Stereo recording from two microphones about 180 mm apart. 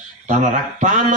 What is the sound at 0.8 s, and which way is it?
Speech, 45° right (ahead or behind).